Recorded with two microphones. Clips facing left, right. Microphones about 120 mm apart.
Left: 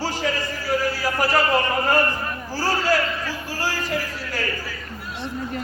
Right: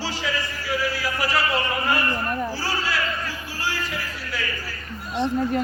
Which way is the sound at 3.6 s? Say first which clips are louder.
Left 3 dB; 40° left (ahead or behind).